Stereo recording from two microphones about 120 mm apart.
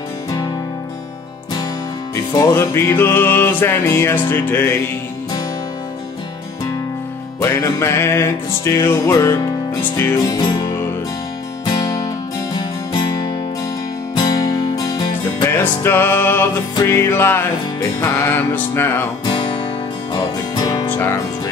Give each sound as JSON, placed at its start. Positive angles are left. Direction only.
{"t": 2.3, "sound": "music", "side_deg": 25}
{"t": 7.3, "sound": "music", "side_deg": 25}
{"t": 15.5, "sound": "music", "side_deg": 20}
{"t": 20.1, "sound": "music", "side_deg": 30}
{"t": 20.9, "sound": "music", "side_deg": 20}